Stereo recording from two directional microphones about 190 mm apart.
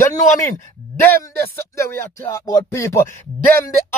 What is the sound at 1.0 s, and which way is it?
A man's voice, 10° left (ahead or behind).